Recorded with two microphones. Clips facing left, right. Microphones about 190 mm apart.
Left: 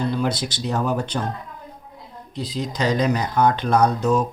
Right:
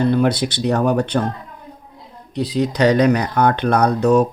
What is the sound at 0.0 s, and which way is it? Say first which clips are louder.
Speech: right 7 dB; 60° right (ahead or behind).